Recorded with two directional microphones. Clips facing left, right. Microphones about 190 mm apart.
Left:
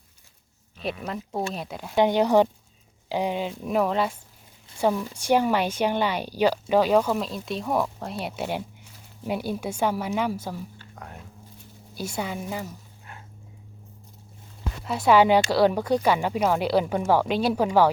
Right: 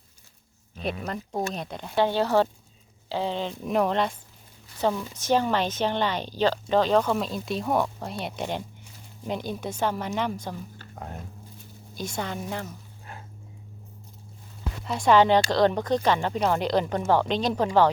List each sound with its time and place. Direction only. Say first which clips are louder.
0.8 s speech: even; centre (ahead or behind)
2.0 s a woman's voice: left 3 dB; 15° left (ahead or behind)
10.9 s speech: right 6 dB; 30° right (ahead or behind)
11.9 s a woman's voice: left 1 dB; 10° left (ahead or behind)
14.8 s a woman's voice: left 1 dB; 5° left (ahead or behind)